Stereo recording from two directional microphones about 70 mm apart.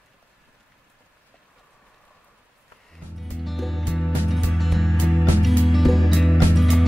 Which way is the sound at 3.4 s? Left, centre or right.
Centre.